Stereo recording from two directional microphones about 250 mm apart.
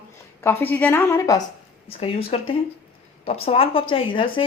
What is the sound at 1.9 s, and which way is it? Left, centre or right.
A woman's voice, left.